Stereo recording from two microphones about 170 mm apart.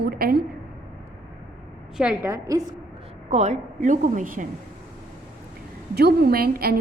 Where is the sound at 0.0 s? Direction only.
60° right (ahead or behind).